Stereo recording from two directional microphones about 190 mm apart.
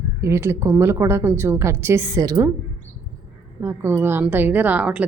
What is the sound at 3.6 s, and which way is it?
Speech, 15° right (ahead or behind).